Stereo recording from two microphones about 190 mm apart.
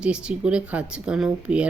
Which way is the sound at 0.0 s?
5° right (ahead or behind).